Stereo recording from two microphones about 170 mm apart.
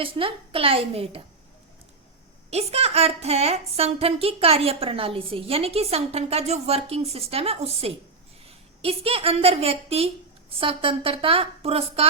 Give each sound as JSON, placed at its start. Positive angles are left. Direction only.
{"t": 0.0, "sound": "a woman's voice", "side_deg": -30}
{"t": 2.5, "sound": "a woman's voice", "side_deg": -40}